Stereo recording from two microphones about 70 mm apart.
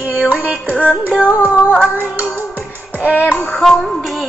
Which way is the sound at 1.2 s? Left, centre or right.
Left.